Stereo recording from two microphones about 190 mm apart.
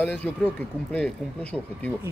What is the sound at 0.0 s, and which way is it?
Speech, 10° left (ahead or behind).